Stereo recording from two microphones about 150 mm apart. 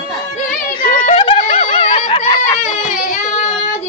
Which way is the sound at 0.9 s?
35° left (ahead or behind).